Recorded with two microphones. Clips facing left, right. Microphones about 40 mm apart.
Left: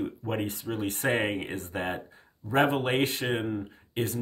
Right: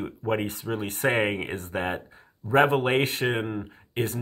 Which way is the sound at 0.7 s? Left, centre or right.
Right.